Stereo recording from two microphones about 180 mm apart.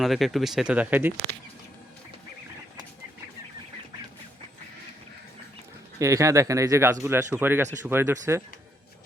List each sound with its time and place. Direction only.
0.0 s speech: centre (ahead or behind)
6.0 s speech: 15° right (ahead or behind)